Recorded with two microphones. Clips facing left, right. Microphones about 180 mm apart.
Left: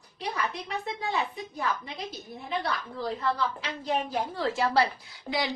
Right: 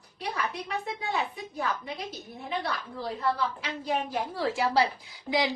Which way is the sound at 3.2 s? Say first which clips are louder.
Right 2 dB; 5° right (ahead or behind).